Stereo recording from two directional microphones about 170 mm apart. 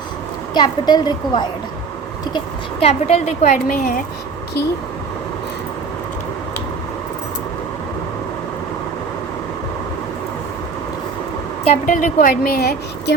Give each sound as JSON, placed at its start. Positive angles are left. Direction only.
{"t": 0.5, "sound": "a woman's voice", "side_deg": 25}
{"t": 2.8, "sound": "a woman's voice", "side_deg": 35}
{"t": 3.4, "sound": "a woman's voice", "side_deg": 55}
{"t": 11.6, "sound": "a woman's voice", "side_deg": 45}